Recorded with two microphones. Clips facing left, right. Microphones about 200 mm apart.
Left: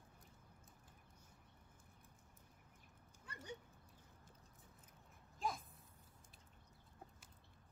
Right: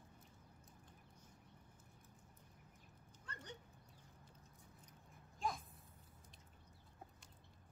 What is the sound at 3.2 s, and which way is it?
Dog, 10° left (ahead or behind).